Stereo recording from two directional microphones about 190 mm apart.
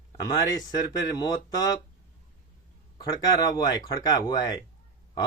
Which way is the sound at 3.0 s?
20° left (ahead or behind).